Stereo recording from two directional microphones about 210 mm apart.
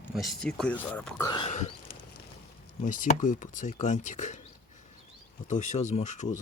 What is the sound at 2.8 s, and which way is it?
Speech, 35° left (ahead or behind).